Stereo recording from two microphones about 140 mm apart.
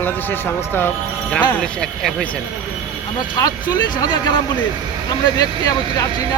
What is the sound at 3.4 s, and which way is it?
Speech, 30° left (ahead or behind).